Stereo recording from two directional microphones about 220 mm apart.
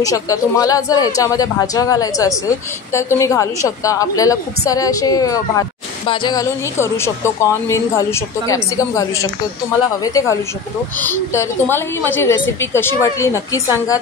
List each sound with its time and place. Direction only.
0.0 s a woman's voice: 15° left (ahead or behind)